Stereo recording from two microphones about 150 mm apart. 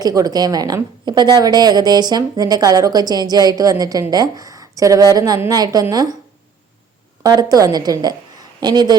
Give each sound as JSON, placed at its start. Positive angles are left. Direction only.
{"t": 0.0, "sound": "a woman's voice", "side_deg": -25}
{"t": 7.2, "sound": "a woman's voice", "side_deg": -25}